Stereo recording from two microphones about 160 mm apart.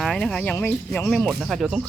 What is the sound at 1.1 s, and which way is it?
Speech, centre (ahead or behind).